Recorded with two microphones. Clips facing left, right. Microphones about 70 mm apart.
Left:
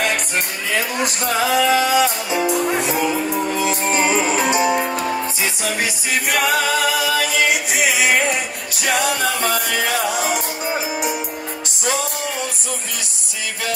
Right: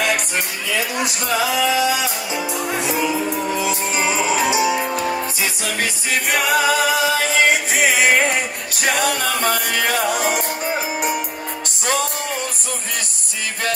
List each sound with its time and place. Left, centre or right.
1.0 s speech: left
3.7 s music: left
6.3 s a capella: centre
6.8 s music: right